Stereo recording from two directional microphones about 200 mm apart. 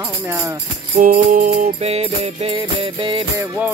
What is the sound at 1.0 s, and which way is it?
Music, 40° right (ahead or behind).